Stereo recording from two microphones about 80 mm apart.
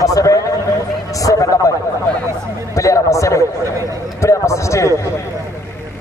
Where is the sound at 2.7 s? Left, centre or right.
Left.